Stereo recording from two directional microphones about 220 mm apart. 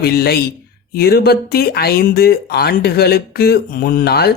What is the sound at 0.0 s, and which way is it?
Speech, 45° left (ahead or behind).